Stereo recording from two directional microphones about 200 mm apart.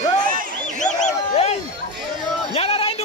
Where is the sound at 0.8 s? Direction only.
35° left (ahead or behind).